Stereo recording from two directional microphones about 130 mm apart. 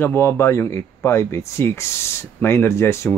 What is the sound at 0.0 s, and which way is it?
Speech, 20° left (ahead or behind).